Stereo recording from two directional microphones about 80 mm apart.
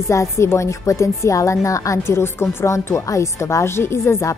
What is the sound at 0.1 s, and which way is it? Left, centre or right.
A woman's voice, left.